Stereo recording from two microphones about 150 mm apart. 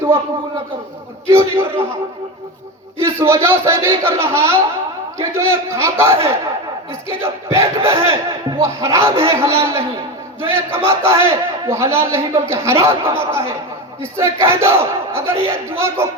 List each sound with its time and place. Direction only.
1.3 s a man's voice: 15° right (ahead or behind)
3.0 s a man's voice: 15° right (ahead or behind)